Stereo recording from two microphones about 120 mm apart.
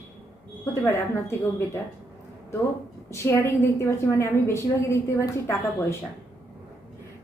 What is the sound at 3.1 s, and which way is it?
A woman's voice, 25° left (ahead or behind).